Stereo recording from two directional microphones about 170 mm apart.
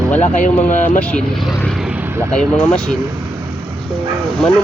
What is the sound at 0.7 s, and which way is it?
Speech, 45° left (ahead or behind).